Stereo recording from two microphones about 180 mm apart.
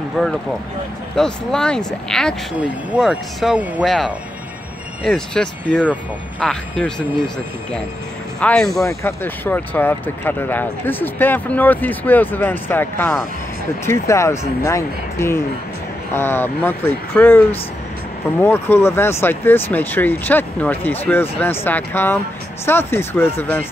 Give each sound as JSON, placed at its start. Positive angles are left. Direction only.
{"t": 0.2, "sound": "speech", "side_deg": 5}
{"t": 8.4, "sound": "speech", "side_deg": 5}